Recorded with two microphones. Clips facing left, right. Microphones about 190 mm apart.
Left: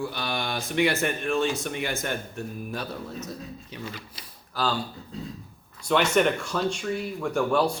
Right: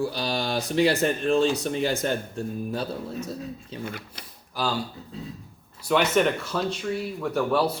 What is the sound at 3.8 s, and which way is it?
Speech, 55° right (ahead or behind).